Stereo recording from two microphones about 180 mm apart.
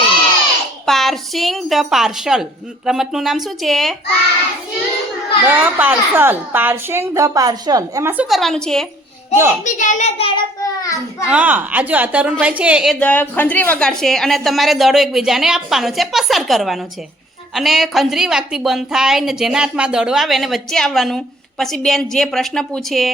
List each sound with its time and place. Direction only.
0.9 s a woman's voice: centre (ahead or behind)
5.5 s a woman's voice: 10° right (ahead or behind)
9.3 s a woman's voice: 15° right (ahead or behind)
9.6 s child singing: 45° left (ahead or behind)
10.6 s a child's voice: 20° left (ahead or behind)
11.3 s a woman's voice: 10° right (ahead or behind)